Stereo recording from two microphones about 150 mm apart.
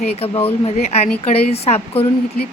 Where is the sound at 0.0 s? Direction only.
40° left (ahead or behind).